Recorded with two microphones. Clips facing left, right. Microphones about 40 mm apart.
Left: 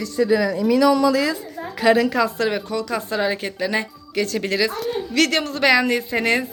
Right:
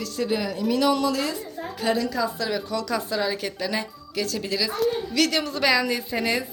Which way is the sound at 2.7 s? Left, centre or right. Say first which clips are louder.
Left 2 dB; left.